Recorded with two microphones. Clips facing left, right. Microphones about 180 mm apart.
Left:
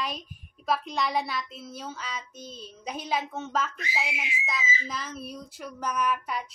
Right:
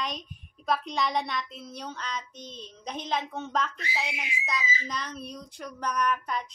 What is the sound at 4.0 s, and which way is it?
Speech, 5° left (ahead or behind).